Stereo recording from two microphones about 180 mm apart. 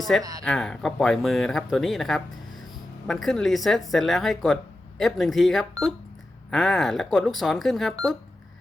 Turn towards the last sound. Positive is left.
turn(degrees=0)  # may be behind; listen again after turning